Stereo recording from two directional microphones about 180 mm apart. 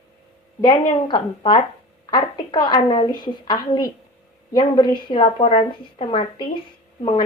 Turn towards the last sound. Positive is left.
turn(degrees=25)  # may be behind; listen again after turning